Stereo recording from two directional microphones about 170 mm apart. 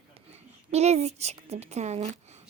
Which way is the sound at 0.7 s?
40° right (ahead or behind).